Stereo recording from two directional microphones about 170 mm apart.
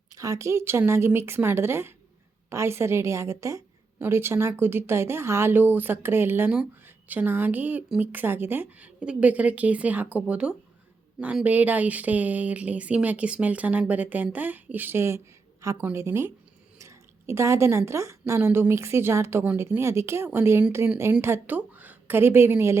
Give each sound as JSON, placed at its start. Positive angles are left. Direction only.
{"t": 0.1, "sound": "a woman's voice", "side_deg": -20}